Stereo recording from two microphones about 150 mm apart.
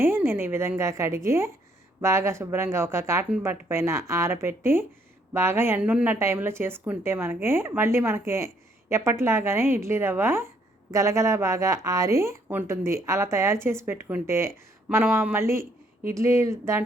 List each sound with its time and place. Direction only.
0.0 s speech: 15° right (ahead or behind)